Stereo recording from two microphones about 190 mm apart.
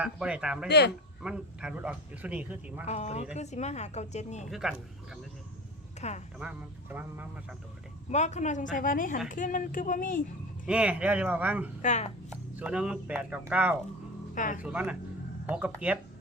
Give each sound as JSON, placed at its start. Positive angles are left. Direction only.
{"t": 0.0, "sound": "speech", "side_deg": -5}
{"t": 0.7, "sound": "speech", "side_deg": 60}
{"t": 1.2, "sound": "speech", "side_deg": -5}
{"t": 2.8, "sound": "a woman's voice", "side_deg": 35}
{"t": 4.4, "sound": "speech", "side_deg": 0}
{"t": 6.0, "sound": "speech", "side_deg": 35}
{"t": 6.4, "sound": "speech", "side_deg": -5}
{"t": 8.1, "sound": "a woman's voice", "side_deg": 40}
{"t": 10.7, "sound": "speech", "side_deg": -5}
{"t": 11.8, "sound": "a woman's voice", "side_deg": 40}
{"t": 12.5, "sound": "speech", "side_deg": -5}
{"t": 14.3, "sound": "speech", "side_deg": 45}
{"t": 14.6, "sound": "speech", "side_deg": -5}